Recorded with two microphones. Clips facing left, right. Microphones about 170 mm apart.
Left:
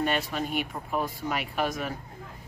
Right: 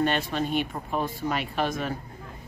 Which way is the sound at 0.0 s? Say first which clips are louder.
Right 3 dB; 10° left (ahead or behind).